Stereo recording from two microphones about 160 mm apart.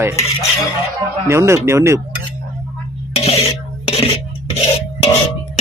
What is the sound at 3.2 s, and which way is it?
Speech, 35° left (ahead or behind).